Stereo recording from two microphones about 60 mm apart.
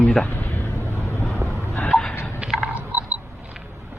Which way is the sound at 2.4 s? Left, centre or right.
Centre.